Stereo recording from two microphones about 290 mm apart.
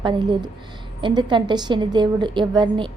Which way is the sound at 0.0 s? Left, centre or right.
Centre.